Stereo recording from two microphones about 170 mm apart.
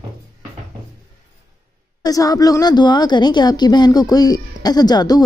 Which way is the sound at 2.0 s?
20° left (ahead or behind).